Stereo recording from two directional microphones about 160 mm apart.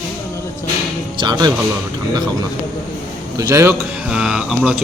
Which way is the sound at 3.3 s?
20° right (ahead or behind).